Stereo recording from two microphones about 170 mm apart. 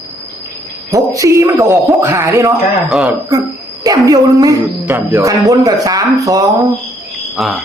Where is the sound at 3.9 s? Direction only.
20° right (ahead or behind).